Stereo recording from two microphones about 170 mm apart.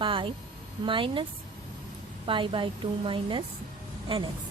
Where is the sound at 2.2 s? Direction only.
30° right (ahead or behind).